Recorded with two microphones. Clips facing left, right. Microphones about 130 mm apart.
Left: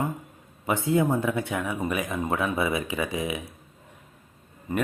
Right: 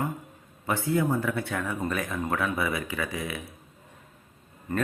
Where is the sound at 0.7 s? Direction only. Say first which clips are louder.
Left 2 dB; 20° left (ahead or behind).